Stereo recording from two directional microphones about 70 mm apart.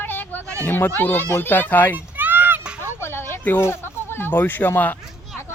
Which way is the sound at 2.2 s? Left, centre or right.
Right.